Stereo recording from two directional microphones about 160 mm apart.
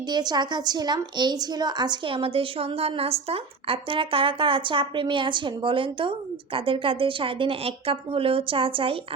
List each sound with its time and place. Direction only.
0.1 s a woman's voice: 25° right (ahead or behind)